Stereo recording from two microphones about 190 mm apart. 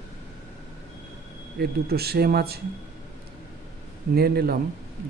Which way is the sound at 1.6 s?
55° right (ahead or behind).